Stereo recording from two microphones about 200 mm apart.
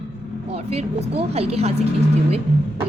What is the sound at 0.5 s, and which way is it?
A woman's voice, 30° right (ahead or behind).